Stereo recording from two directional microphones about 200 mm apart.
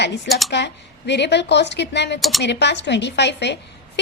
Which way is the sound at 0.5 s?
60° left (ahead or behind).